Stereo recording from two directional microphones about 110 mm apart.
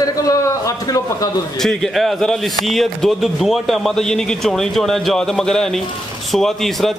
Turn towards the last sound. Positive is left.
turn(degrees=0)  # may be behind; listen again after turning